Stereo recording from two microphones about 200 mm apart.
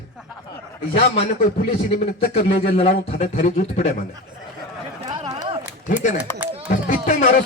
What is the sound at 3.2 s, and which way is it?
Speech, 35° left (ahead or behind).